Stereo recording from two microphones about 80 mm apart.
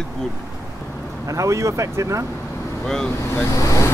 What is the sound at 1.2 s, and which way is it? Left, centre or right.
Speech, right.